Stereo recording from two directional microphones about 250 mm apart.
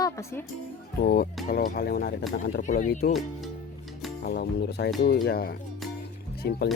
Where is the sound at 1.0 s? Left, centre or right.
Left.